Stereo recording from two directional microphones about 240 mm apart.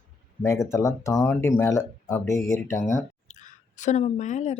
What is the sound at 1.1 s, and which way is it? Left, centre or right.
Speech, centre.